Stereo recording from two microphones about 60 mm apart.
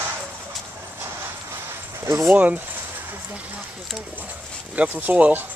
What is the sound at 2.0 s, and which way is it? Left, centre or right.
Speech, right.